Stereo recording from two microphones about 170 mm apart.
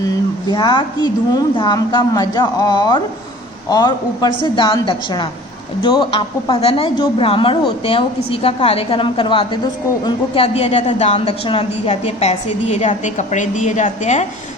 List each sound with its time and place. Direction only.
0.0 s a woman's voice: 25° left (ahead or behind); by 14.3 s 45° left (ahead or behind)